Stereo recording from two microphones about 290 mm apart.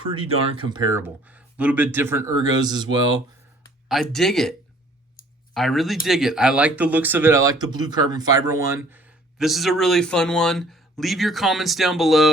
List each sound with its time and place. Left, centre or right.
0.0 s speech: centre
3.8 s speech: centre
5.5 s speech: centre